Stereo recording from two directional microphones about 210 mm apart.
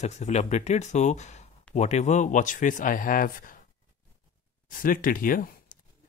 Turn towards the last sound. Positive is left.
turn(degrees=40)  # may be behind; listen again after turning